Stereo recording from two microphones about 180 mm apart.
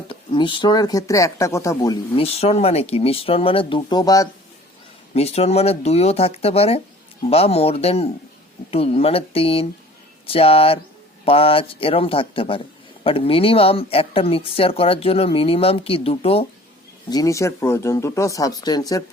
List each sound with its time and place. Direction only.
0.1 s speech: 30° left (ahead or behind)
2.2 s speech: 35° left (ahead or behind); by 4.3 s 20° left (ahead or behind)
5.1 s speech: 35° left (ahead or behind)
17.1 s speech: 20° left (ahead or behind)